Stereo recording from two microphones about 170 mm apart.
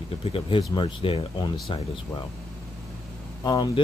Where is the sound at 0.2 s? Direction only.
30° left (ahead or behind).